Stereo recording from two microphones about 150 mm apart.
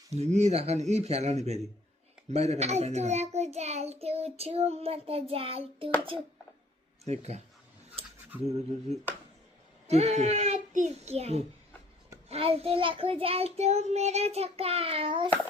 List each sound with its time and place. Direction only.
0.1 s a child's voice: 50° right (ahead or behind)
7.0 s speech: 45° right (ahead or behind)
9.8 s a child's voice: 45° right (ahead or behind)
12.3 s child singing: 40° right (ahead or behind)